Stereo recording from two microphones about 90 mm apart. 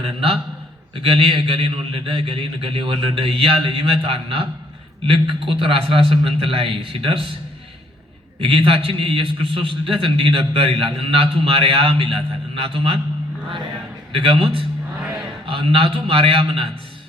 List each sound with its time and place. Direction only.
0.0 s a man's voice: 90° right
8.4 s a man's voice: 90° right
14.1 s a man's voice: 90° right